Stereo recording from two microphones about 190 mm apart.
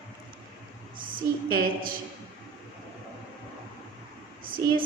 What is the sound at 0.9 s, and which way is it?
Speech, 50° right (ahead or behind).